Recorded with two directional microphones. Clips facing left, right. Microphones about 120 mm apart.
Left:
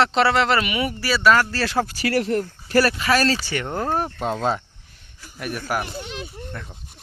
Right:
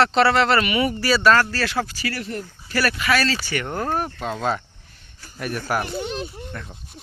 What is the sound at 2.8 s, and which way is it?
Speech, 35° left (ahead or behind).